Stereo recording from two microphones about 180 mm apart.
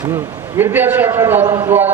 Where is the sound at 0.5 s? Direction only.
10° right (ahead or behind).